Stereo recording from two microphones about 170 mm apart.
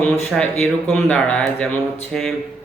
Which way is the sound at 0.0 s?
5° left (ahead or behind).